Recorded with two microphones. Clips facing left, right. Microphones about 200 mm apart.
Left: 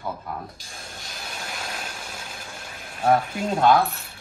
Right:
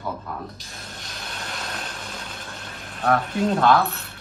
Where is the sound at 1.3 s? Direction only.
5° left (ahead or behind).